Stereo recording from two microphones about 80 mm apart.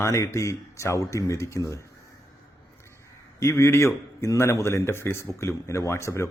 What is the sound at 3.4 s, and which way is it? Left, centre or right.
A man's voice, left.